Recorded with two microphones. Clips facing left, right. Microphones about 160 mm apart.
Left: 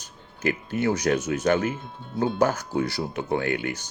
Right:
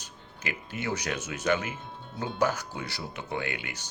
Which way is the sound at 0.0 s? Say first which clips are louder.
Left 11 dB; 45° left (ahead or behind).